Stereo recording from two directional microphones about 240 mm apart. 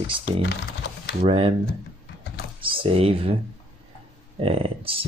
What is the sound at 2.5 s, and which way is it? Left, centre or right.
Speech, right.